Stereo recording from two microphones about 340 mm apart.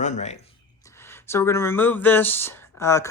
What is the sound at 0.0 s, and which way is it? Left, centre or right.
Speech, centre.